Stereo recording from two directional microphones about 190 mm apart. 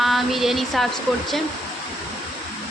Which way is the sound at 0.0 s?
Centre (ahead or behind).